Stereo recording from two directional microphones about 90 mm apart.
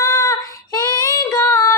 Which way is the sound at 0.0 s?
35° left (ahead or behind).